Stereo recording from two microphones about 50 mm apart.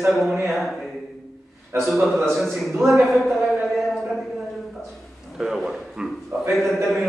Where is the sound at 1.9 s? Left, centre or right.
Centre.